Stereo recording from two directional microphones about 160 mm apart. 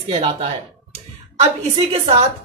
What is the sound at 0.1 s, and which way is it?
Speech, 40° right (ahead or behind).